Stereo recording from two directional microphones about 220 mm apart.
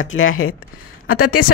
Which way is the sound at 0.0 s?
65° left (ahead or behind).